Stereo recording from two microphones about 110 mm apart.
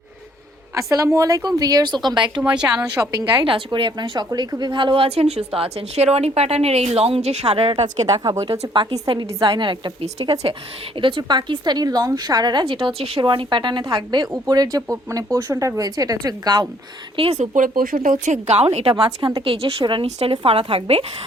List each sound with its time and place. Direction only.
0.8 s a woman's voice: 30° right (ahead or behind); by 2.4 s 45° right (ahead or behind)
2.6 s a woman's voice: 25° right (ahead or behind)
3.0 s a woman's voice: 35° right (ahead or behind)
5.0 s a woman's voice: 70° right (ahead or behind)
8.0 s a woman's voice: 35° right (ahead or behind)
9.1 s a woman's voice: 45° right (ahead or behind)
17.2 s a woman's voice: 70° right (ahead or behind)
17.9 s a woman's voice: 50° right (ahead or behind)
18.3 s a woman's voice: 85° right; by 20.1 s 50° right (ahead or behind)
20.1 s speech: 80° right
20.3 s speech: 60° right (ahead or behind)